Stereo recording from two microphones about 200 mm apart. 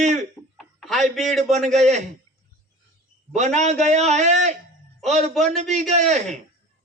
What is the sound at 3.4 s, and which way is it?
A man's voice, 35° right (ahead or behind).